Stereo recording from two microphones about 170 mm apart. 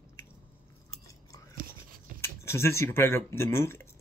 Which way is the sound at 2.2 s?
15° left (ahead or behind).